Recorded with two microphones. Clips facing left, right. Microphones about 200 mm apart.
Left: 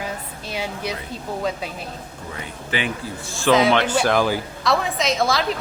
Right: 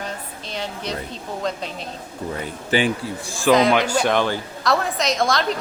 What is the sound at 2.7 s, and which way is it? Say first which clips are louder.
Speech: right 5 dB; 30° right (ahead or behind).